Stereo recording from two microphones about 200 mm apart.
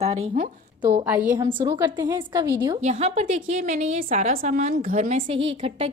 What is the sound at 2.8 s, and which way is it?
A woman's voice, 35° right (ahead or behind).